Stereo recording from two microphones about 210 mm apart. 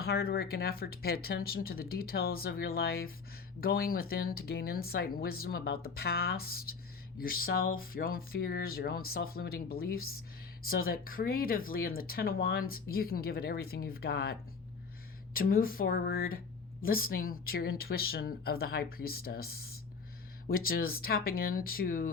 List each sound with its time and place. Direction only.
0.0 s speech: 50° left (ahead or behind)